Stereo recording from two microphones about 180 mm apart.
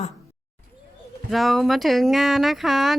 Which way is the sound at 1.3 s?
Centre (ahead or behind).